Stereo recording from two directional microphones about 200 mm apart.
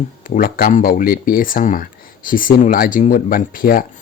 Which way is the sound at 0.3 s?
45° left (ahead or behind).